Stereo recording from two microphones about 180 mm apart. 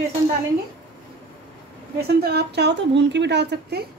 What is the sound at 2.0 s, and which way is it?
A woman's voice, 60° right (ahead or behind).